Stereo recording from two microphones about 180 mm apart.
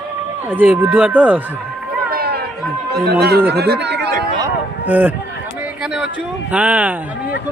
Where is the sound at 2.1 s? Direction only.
60° right (ahead or behind).